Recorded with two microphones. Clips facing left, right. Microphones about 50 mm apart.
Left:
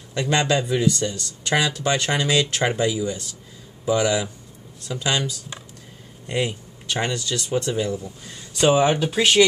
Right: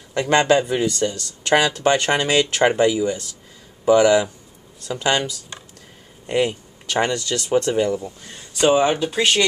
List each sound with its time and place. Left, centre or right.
0.1 s speech: right
6.3 s speech: right
8.0 s speech: right
8.5 s speech: centre